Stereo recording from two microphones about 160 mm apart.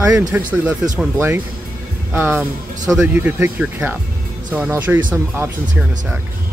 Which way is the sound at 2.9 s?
5° right (ahead or behind).